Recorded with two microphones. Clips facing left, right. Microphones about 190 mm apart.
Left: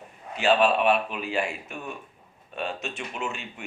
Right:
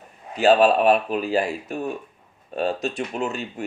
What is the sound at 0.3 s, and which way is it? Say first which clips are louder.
Speech: right 5 dB; 40° right (ahead or behind).